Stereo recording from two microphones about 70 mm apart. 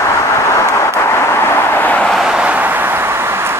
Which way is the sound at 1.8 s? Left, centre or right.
Left.